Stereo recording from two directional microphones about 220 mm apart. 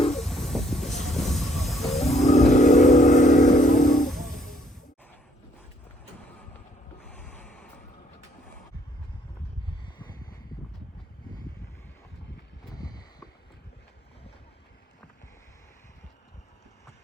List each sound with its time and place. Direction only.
0.1 s train: centre (ahead or behind)
1.9 s vehicle: 30° left (ahead or behind)
4.0 s music: centre (ahead or behind)
7.1 s a sound: 5° left (ahead or behind)
10.0 s a sound: 20° left (ahead or behind)
12.7 s boat: 15° left (ahead or behind)